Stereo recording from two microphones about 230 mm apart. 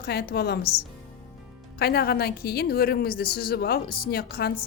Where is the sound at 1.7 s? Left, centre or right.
Left.